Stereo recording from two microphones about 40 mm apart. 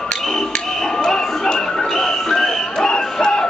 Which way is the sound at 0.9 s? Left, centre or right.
Centre.